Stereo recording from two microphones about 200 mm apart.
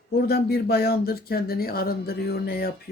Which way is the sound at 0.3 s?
50° left (ahead or behind).